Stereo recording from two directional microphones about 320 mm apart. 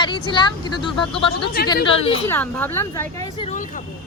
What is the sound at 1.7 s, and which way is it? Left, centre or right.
Speech, centre.